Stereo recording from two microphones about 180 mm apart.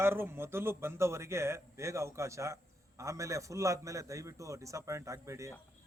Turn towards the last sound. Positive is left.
turn(degrees=-15)  # may be behind; listen again after turning